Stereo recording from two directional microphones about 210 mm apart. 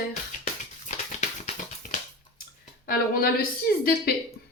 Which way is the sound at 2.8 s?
45° left (ahead or behind).